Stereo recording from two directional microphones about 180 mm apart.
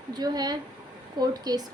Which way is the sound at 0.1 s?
20° right (ahead or behind).